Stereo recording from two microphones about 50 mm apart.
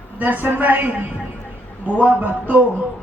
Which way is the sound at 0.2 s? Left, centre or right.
Right.